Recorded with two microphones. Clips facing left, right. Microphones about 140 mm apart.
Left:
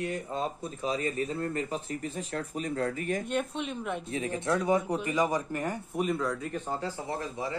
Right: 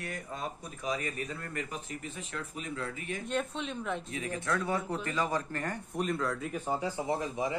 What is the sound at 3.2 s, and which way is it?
Speech, 5° left (ahead or behind).